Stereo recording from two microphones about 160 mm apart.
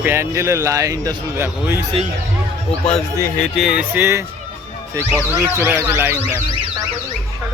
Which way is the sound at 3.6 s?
5° right (ahead or behind).